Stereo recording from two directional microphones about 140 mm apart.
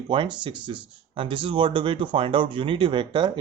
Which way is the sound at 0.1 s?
35° right (ahead or behind).